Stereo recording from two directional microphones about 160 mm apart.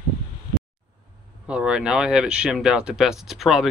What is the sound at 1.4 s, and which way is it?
Speech, 5° right (ahead or behind).